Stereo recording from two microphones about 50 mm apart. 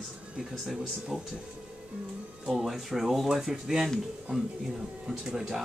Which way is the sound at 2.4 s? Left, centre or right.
Centre.